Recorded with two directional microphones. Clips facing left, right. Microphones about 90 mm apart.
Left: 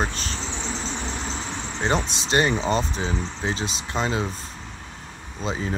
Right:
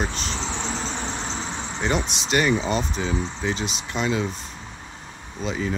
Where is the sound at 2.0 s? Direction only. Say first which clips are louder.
Even; 15° right (ahead or behind).